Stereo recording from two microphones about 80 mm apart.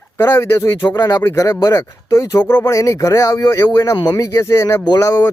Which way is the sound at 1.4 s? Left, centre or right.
Left.